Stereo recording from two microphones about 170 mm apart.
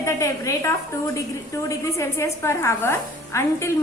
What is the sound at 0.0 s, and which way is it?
A woman's voice, 15° left (ahead or behind).